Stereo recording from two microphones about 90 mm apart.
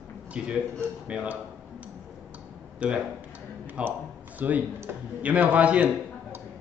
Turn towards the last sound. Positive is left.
turn(degrees=-15)  # may be behind; listen again after turning